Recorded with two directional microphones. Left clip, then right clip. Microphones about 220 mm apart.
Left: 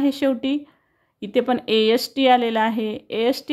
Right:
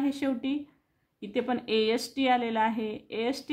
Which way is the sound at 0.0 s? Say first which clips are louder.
Left 9 dB; 30° left (ahead or behind).